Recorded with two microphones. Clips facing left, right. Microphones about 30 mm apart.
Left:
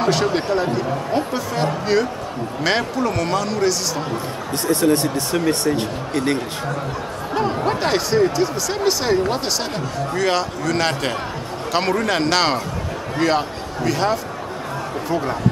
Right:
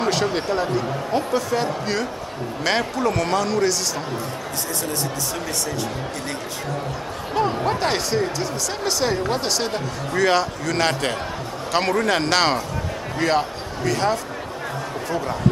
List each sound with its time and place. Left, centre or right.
0.0 s a man's voice: centre
4.6 s speech: left
7.3 s a man's voice: centre